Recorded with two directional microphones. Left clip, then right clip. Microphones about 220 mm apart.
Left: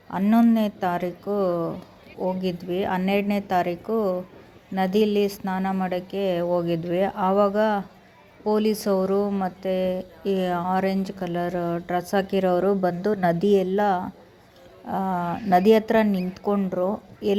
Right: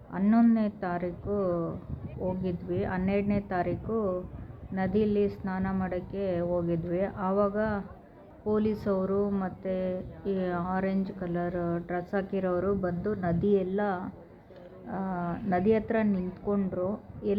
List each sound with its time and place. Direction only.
0.1 s speech: 20° left (ahead or behind)